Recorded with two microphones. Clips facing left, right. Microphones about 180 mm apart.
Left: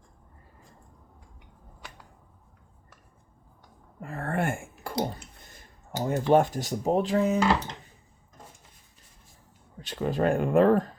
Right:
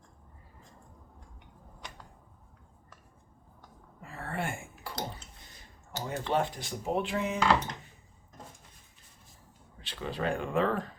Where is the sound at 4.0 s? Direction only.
55° left (ahead or behind).